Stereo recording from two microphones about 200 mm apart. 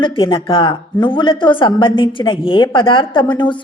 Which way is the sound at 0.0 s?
25° left (ahead or behind).